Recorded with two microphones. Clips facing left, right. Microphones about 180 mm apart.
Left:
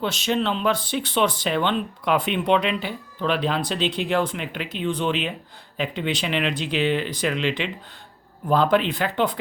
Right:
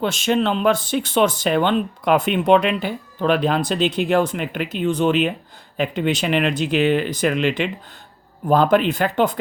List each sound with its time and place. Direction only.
0.0 s speech: 50° right (ahead or behind)